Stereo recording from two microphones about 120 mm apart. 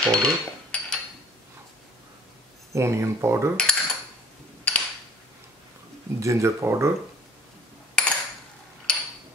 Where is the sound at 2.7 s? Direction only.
25° right (ahead or behind).